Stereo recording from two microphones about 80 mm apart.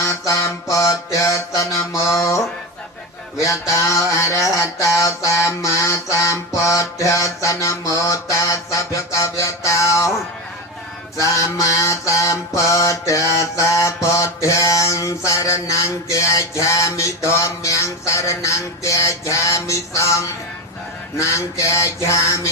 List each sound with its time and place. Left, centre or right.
0.0 s mantra: left
3.4 s mantra: left
11.2 s mantra: left